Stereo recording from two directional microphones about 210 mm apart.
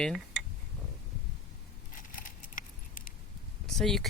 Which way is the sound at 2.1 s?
40° left (ahead or behind).